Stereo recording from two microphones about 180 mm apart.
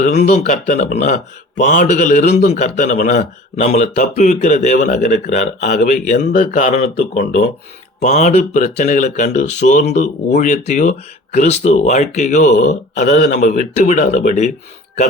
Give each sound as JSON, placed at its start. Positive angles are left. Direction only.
{"t": 0.0, "sound": "a man's voice", "side_deg": 40}
{"t": 13.1, "sound": "speech", "side_deg": 60}
{"t": 13.4, "sound": "a man's voice", "side_deg": 40}